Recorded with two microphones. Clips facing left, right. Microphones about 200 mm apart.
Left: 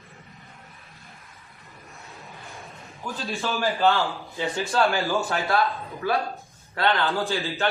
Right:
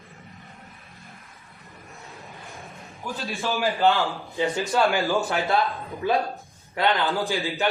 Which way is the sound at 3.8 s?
15° right (ahead or behind).